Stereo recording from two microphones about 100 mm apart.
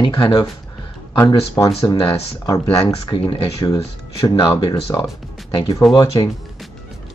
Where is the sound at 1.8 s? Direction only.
55° left (ahead or behind).